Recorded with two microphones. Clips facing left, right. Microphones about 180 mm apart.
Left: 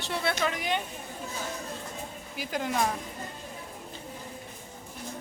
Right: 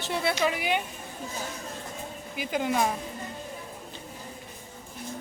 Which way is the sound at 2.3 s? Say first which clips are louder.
Right 3 dB; centre (ahead or behind).